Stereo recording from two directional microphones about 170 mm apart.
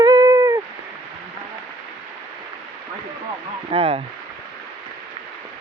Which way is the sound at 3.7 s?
35° right (ahead or behind).